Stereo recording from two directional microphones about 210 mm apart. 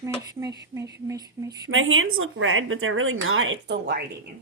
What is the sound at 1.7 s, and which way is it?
Speech, 70° right (ahead or behind).